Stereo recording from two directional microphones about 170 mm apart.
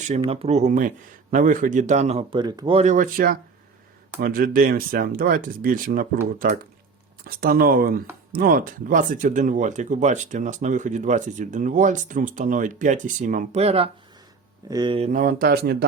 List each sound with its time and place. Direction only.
0.3 s speech: 35° right (ahead or behind)
2.7 s speech: 45° right (ahead or behind)
15.1 s speech: 55° right (ahead or behind)